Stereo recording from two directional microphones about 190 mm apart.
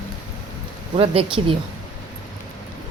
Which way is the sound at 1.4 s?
25° right (ahead or behind).